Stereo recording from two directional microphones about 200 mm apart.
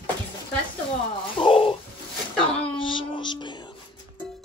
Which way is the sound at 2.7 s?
25° left (ahead or behind).